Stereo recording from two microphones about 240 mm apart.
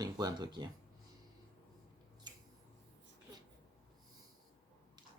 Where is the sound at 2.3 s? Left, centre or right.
Centre.